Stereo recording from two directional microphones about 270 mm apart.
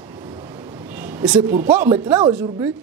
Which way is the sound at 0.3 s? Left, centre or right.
Centre.